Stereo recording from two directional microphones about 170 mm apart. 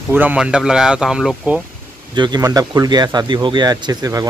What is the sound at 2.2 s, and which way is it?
Speech, 20° right (ahead or behind).